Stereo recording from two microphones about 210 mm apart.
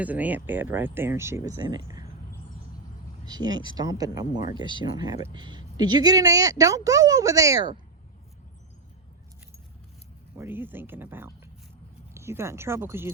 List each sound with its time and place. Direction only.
0.0 s speech: 5° right (ahead or behind)
3.2 s speech: 20° right (ahead or behind)
10.3 s speech: 10° right (ahead or behind)